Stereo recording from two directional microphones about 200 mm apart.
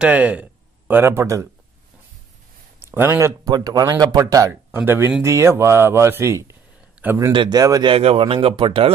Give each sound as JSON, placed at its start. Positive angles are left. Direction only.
{"t": 0.0, "sound": "speech", "side_deg": -5}
{"t": 2.8, "sound": "a man's voice", "side_deg": -10}